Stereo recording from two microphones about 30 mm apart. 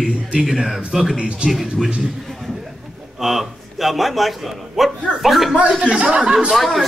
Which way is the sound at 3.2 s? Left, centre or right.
Centre.